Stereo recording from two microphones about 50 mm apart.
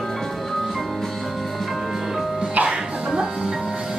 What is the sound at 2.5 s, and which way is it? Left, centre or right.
Music, right.